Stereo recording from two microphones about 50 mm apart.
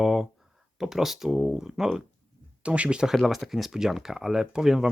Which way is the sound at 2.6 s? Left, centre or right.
Right.